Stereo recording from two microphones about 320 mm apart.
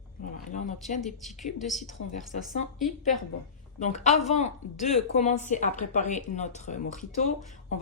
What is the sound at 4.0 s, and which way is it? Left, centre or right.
A woman's voice, left.